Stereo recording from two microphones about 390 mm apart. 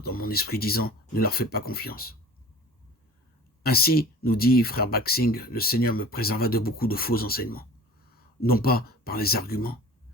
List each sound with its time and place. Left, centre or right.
0.0 s speech: left
3.6 s speech: left